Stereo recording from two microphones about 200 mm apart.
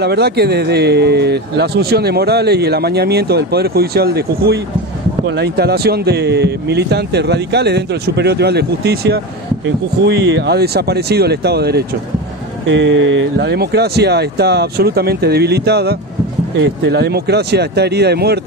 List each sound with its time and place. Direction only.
0.0 s a man's voice: 55° right (ahead or behind)
12.6 s a man's voice: 65° right (ahead or behind)